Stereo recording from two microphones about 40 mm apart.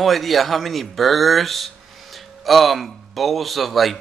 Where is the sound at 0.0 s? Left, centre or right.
Centre.